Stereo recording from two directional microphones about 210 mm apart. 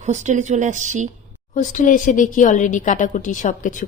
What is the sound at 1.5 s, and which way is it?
Speech, 35° left (ahead or behind).